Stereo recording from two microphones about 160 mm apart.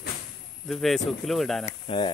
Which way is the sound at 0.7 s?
Centre (ahead or behind).